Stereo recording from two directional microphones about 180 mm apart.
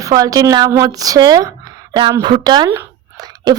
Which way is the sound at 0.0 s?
20° right (ahead or behind).